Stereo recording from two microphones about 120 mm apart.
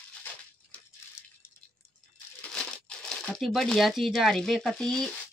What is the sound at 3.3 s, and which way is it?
Speech, centre (ahead or behind).